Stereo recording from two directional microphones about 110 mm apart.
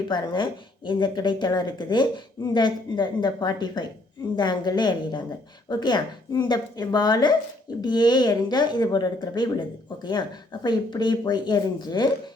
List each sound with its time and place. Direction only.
0.1 s speech: 45° left (ahead or behind)